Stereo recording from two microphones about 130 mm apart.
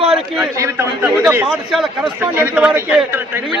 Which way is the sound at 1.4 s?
Centre (ahead or behind).